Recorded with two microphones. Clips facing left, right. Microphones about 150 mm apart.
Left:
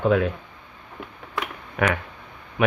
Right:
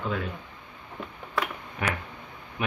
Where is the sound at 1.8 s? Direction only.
70° left (ahead or behind).